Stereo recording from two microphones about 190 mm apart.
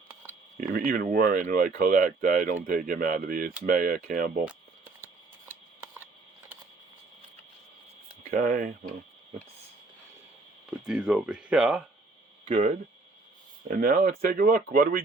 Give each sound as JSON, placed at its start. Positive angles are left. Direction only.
{"t": 0.7, "sound": "speech", "side_deg": -50}
{"t": 8.3, "sound": "speech", "side_deg": -45}
{"t": 10.8, "sound": "speech", "side_deg": -5}
{"t": 12.5, "sound": "speech", "side_deg": -35}
{"t": 13.7, "sound": "speech", "side_deg": -50}